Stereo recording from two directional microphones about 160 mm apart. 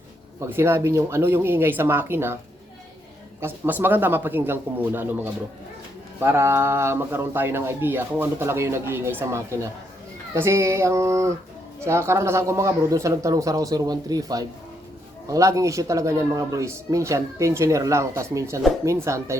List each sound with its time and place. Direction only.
0.3 s speech: 15° right (ahead or behind)
3.4 s speech: 10° right (ahead or behind)